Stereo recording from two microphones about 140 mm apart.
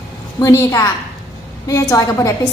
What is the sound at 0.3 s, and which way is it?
A woman's voice, 20° left (ahead or behind).